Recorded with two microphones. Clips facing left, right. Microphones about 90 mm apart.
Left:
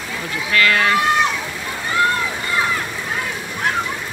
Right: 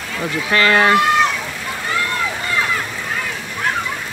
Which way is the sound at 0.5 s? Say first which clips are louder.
Right 3 dB; 30° right (ahead or behind).